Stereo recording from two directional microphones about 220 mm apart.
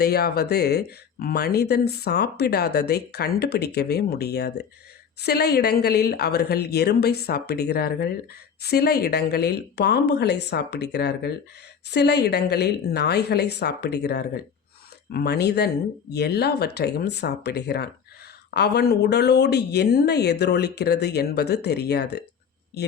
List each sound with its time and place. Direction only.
0.0 s speech: 45° left (ahead or behind)